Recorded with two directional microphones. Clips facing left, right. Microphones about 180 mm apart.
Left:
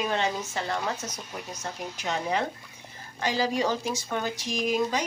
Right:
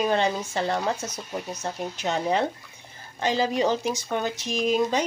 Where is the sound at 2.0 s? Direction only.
30° right (ahead or behind).